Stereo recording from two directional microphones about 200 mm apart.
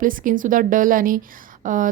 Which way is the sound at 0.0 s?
45° right (ahead or behind).